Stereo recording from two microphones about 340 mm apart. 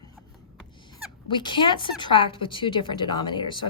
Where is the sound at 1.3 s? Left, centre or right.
Centre.